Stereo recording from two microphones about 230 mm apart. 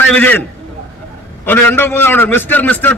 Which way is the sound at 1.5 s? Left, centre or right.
Centre.